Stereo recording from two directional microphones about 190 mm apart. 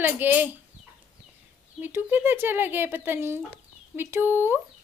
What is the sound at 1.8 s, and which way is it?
Speech, 10° right (ahead or behind).